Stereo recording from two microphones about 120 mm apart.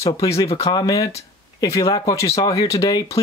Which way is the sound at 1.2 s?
25° left (ahead or behind).